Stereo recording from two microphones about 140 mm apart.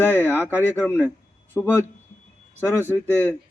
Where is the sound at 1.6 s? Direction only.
10° left (ahead or behind).